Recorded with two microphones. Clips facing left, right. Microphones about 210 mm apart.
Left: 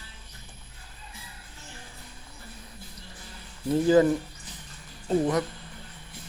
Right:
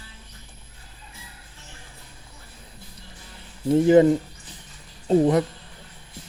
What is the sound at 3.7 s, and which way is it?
Speech, 25° right (ahead or behind).